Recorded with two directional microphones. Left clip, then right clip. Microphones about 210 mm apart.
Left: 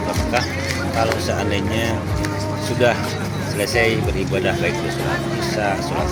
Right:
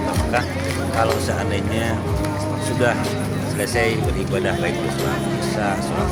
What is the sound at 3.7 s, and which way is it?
Speech, 20° left (ahead or behind).